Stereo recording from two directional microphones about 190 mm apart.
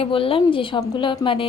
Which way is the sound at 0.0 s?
30° left (ahead or behind).